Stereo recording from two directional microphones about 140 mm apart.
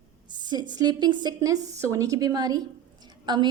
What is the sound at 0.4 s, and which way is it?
Speech, 30° right (ahead or behind).